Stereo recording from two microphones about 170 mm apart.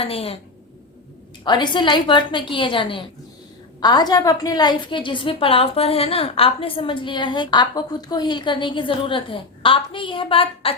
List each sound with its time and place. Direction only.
0.0 s a woman's voice: 35° left (ahead or behind)
1.5 s a woman's voice: 25° left (ahead or behind)